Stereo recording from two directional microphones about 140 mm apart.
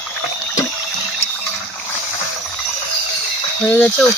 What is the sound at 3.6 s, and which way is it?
Speech, 10° left (ahead or behind).